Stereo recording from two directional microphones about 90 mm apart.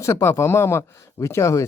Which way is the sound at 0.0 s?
35° left (ahead or behind).